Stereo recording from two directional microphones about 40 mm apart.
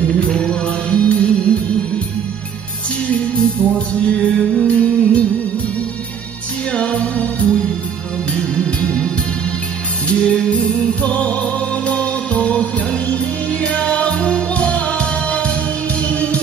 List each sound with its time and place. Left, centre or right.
0.1 s music: left
3.7 s music: left
6.7 s music: left
8.8 s music: left